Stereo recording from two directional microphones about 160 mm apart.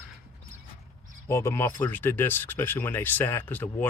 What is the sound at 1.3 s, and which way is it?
Speech, 15° left (ahead or behind).